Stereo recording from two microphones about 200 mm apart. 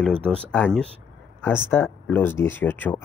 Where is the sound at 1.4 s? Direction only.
10° left (ahead or behind).